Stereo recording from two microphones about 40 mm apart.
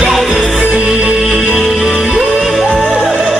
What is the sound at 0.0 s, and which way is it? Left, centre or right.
Music, centre.